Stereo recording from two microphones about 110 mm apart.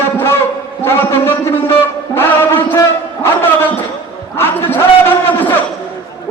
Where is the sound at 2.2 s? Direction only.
20° left (ahead or behind).